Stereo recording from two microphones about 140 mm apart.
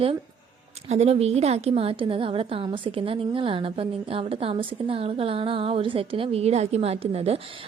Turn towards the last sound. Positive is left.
turn(degrees=-45)  # may be behind; listen again after turning